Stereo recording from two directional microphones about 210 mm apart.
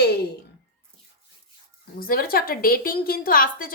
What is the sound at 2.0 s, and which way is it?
Speech, 45° left (ahead or behind).